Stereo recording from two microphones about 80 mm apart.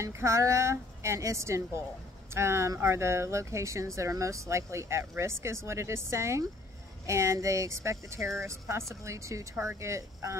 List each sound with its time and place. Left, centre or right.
0.0 s speech: right